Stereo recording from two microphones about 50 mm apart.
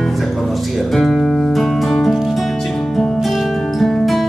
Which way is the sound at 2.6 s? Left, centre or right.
Centre.